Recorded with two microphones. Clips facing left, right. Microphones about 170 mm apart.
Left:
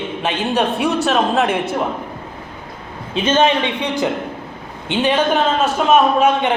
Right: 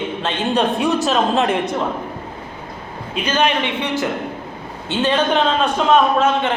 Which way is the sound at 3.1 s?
25° left (ahead or behind).